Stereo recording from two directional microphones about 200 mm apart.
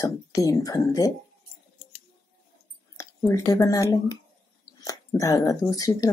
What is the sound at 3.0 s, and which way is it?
Speech, 15° left (ahead or behind).